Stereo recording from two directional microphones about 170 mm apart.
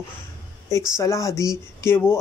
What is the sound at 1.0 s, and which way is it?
Speech, 20° left (ahead or behind).